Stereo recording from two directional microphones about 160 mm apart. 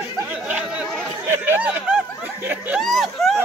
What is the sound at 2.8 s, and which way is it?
Speech, centre (ahead or behind).